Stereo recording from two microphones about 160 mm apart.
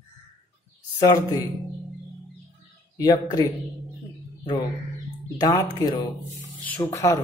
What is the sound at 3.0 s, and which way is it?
Speech, 20° left (ahead or behind).